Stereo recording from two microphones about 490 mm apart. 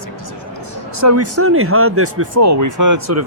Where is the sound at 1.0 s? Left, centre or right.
Right.